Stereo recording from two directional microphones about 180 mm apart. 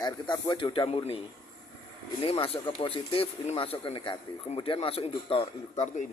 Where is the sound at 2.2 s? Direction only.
30° left (ahead or behind).